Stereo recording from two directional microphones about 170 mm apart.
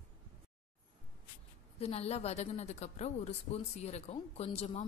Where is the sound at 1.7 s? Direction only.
35° left (ahead or behind).